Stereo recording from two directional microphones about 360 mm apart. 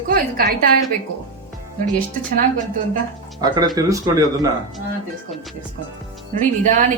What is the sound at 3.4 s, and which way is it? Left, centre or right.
Speech, centre.